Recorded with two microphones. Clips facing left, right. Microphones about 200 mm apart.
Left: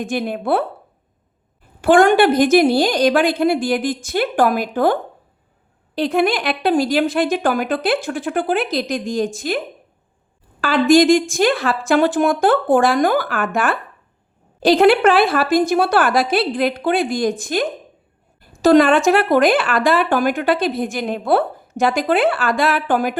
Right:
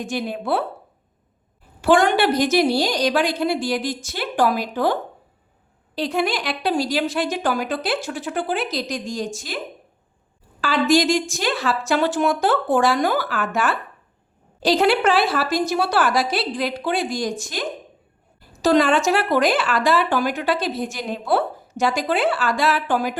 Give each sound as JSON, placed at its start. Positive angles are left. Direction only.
{"t": 0.0, "sound": "a woman's voice", "side_deg": 55}
{"t": 1.8, "sound": "a woman's voice", "side_deg": 50}
{"t": 10.6, "sound": "a woman's voice", "side_deg": 55}